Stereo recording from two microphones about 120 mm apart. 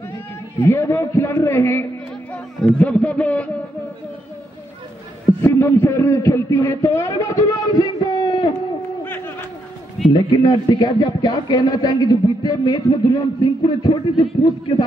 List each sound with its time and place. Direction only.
0.6 s a man's voice: 20° left (ahead or behind)
5.4 s a man's voice: 20° left (ahead or behind)
10.1 s speech: 35° left (ahead or behind)